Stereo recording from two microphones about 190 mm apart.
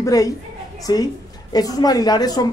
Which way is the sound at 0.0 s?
20° left (ahead or behind).